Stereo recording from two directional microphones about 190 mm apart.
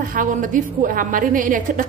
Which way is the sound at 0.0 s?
45° right (ahead or behind).